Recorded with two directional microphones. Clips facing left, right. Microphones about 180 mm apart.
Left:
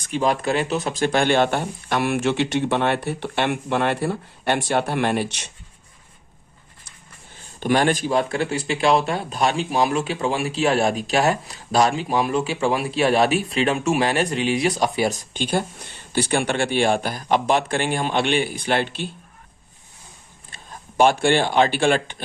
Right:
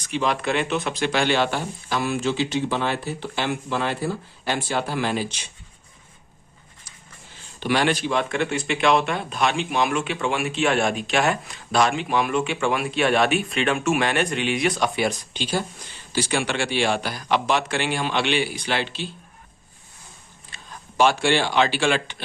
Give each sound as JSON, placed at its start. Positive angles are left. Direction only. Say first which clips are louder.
{"t": 0.0, "sound": "speech", "louder": "left 3 dB", "side_deg": 45}
{"t": 7.6, "sound": "a man's voice", "louder": "left 2 dB", "side_deg": 45}
{"t": 20.7, "sound": "speech", "louder": "left 2 dB", "side_deg": 50}